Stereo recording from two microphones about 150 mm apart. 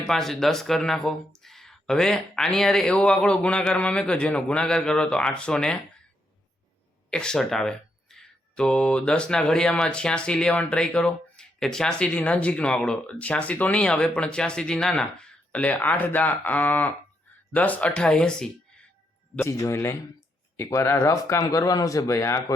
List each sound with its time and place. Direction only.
0.1 s speech: centre (ahead or behind)
7.1 s speech: 5° left (ahead or behind)
19.4 s speech: 20° left (ahead or behind)